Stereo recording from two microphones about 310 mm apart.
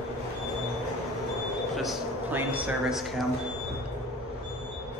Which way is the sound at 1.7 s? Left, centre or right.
Centre.